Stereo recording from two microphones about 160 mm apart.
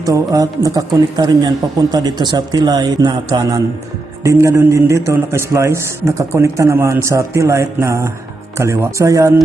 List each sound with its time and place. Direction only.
0.0 s a man's voice: 20° right (ahead or behind)